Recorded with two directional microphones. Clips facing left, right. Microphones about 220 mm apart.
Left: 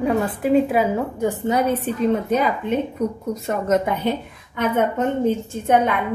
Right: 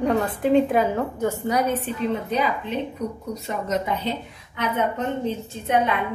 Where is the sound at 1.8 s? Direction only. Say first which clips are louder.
Left 5 dB; 45° left (ahead or behind).